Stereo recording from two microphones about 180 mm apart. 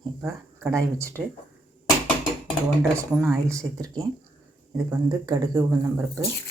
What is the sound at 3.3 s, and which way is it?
Speech, 15° right (ahead or behind).